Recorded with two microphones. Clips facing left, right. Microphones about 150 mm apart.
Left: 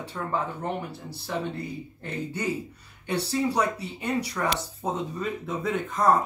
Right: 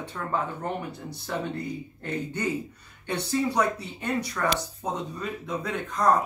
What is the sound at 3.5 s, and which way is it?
Speech, 10° left (ahead or behind).